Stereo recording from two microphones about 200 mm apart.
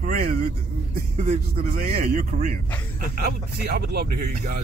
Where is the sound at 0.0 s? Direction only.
40° right (ahead or behind).